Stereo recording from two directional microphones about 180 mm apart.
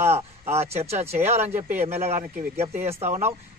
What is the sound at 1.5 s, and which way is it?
Speech, 10° right (ahead or behind).